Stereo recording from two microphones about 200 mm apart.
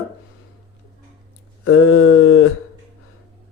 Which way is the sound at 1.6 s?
90° left.